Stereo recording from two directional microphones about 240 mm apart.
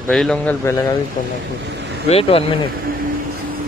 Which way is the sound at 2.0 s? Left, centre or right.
Left.